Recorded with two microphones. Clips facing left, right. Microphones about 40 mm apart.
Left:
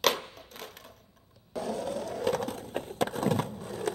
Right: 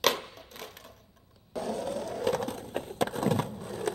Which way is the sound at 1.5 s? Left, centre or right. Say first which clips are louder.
Even; centre.